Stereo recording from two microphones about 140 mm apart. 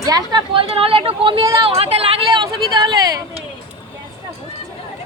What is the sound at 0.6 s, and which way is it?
Speech, 45° right (ahead or behind).